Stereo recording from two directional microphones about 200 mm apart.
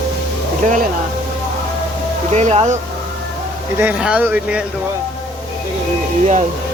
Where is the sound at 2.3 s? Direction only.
35° right (ahead or behind).